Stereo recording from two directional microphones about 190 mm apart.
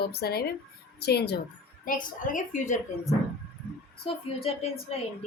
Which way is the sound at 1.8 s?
45° left (ahead or behind).